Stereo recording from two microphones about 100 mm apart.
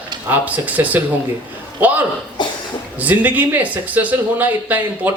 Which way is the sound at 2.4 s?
50° left (ahead or behind).